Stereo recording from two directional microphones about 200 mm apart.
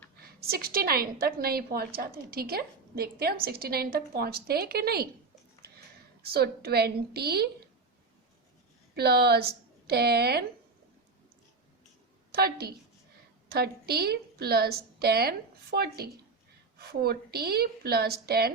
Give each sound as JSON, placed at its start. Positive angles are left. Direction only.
{"t": 0.3, "sound": "a woman's voice", "side_deg": -50}
{"t": 6.2, "sound": "a woman's voice", "side_deg": -50}
{"t": 9.0, "sound": "a woman's voice", "side_deg": -50}
{"t": 12.3, "sound": "a woman's voice", "side_deg": -50}